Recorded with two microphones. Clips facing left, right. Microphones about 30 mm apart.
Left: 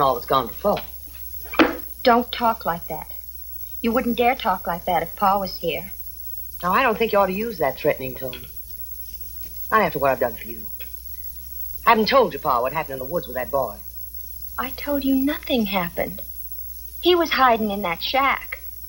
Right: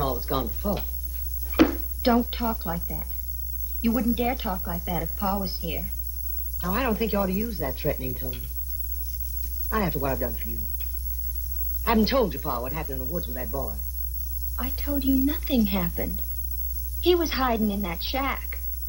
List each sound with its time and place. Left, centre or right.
0.0 s a woman's voice: left